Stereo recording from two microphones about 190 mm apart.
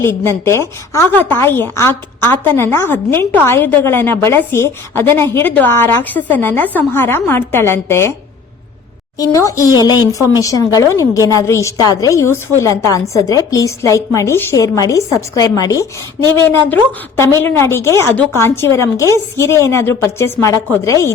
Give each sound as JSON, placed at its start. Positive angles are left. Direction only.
{"t": 0.0, "sound": "a woman's voice", "side_deg": 15}
{"t": 9.1, "sound": "a woman's voice", "side_deg": 15}